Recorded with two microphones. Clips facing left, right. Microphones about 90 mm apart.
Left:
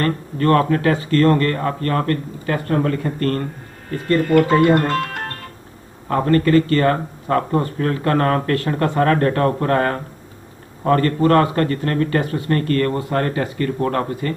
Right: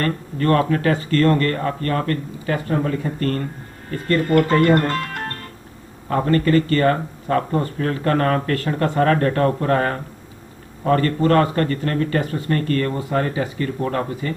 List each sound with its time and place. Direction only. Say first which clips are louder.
0.0 s speech: left 2 dB; 40° left (ahead or behind)
4.5 s speech: left 2 dB; 5° left (ahead or behind)
4.9 s music: left 3 dB; 45° left (ahead or behind)
6.0 s speech: left 2 dB; 40° left (ahead or behind)